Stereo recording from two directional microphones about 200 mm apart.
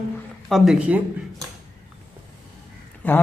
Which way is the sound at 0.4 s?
Centre (ahead or behind).